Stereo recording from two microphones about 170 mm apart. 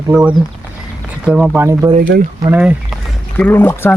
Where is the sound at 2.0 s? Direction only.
60° right (ahead or behind).